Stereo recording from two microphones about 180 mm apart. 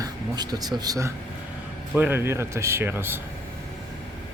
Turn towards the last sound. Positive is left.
turn(degrees=-10)  # may be behind; listen again after turning